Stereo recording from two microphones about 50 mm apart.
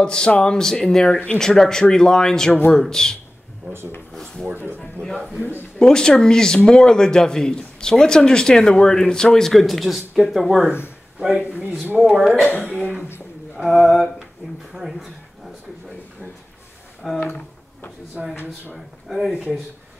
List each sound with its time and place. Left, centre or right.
0.0 s speech: centre
3.7 s rub: right
4.5 s speech: right
5.0 s speech: right
5.8 s speech: centre
11.1 s speech: centre
12.0 s speech: centre
13.6 s a sound: centre
14.7 s speech: centre
17.0 s speech: centre